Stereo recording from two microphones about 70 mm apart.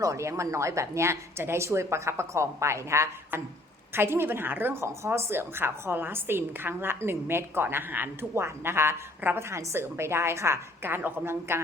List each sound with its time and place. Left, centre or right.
0.0 s speech: right
3.9 s a woman's voice: right